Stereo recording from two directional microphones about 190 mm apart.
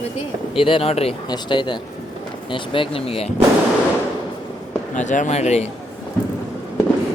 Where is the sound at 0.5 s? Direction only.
30° left (ahead or behind).